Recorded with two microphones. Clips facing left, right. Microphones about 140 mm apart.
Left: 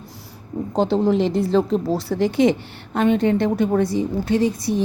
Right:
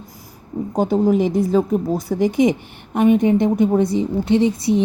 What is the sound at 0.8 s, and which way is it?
A woman's voice, 10° right (ahead or behind).